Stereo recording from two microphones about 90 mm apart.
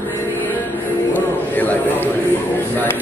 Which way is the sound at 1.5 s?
20° left (ahead or behind).